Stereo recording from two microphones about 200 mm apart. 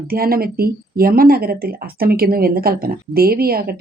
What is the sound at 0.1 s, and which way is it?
A woman's voice, 50° right (ahead or behind).